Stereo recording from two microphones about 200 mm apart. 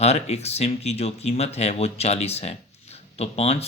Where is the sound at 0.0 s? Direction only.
35° left (ahead or behind).